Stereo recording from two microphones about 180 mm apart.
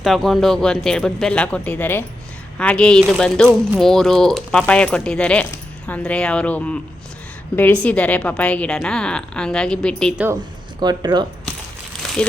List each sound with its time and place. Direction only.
0.0 s speech: centre (ahead or behind)
10.8 s speech: 25° right (ahead or behind)